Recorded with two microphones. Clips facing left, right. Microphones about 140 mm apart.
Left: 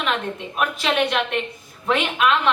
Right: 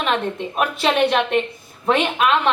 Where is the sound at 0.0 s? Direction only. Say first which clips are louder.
Right 3 dB; 40° right (ahead or behind).